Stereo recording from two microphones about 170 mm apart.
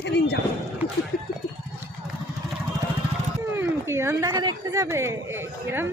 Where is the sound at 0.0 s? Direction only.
75° left (ahead or behind).